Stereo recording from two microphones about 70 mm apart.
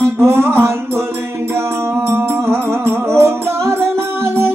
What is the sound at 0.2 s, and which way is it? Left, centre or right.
Music, right.